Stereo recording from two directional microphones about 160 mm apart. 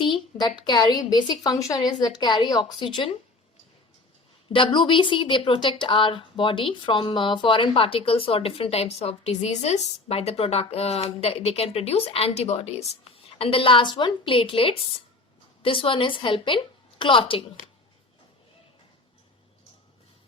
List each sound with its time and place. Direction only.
0.0 s a woman's voice: 30° left (ahead or behind)
4.5 s speech: 30° left (ahead or behind)